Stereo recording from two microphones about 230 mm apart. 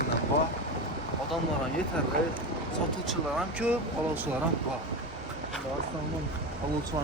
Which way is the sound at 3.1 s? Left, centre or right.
Centre.